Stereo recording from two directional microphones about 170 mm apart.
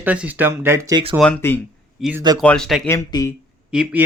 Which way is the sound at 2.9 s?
20° left (ahead or behind).